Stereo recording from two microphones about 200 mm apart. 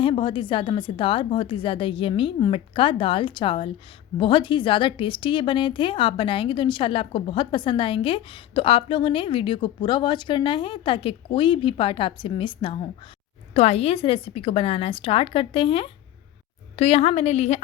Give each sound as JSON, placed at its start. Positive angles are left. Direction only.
{"t": 0.0, "sound": "a woman's voice", "side_deg": 25}